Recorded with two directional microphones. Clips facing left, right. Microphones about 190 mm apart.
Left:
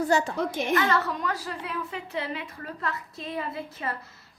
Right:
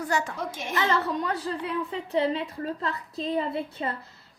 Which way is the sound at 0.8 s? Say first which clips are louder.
Even; 25° right (ahead or behind).